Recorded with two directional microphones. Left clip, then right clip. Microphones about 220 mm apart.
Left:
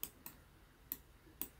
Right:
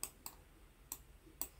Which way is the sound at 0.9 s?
10° right (ahead or behind).